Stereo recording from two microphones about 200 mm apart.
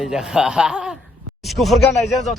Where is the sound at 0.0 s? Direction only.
5° right (ahead or behind).